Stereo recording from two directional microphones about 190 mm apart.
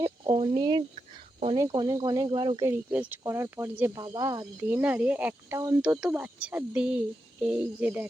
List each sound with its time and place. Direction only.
0.0 s speech: 25° right (ahead or behind)
2.6 s speech: 10° right (ahead or behind)
4.7 s speech: 10° right (ahead or behind)